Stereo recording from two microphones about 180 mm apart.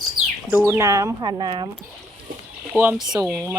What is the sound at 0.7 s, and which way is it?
Speech, 15° right (ahead or behind).